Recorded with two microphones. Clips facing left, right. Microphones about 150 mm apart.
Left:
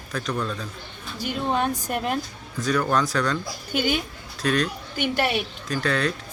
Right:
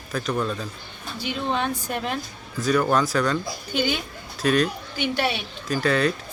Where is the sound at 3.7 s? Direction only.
50° left (ahead or behind).